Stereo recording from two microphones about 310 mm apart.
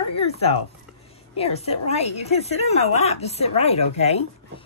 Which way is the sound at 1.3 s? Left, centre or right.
Centre.